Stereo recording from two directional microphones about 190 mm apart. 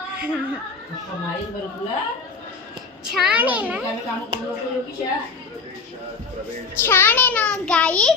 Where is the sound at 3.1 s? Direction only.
5° right (ahead or behind).